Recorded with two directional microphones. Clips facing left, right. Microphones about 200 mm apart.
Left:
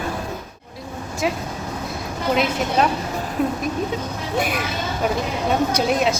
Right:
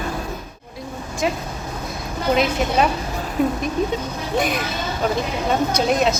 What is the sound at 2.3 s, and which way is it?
Speech, centre (ahead or behind).